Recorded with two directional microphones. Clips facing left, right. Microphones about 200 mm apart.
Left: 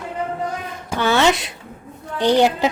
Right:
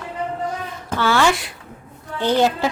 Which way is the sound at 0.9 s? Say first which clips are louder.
Left 1 dB; 20° left (ahead or behind).